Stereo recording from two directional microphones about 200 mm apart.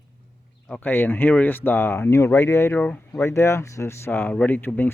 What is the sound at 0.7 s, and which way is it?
Speech, 10° left (ahead or behind).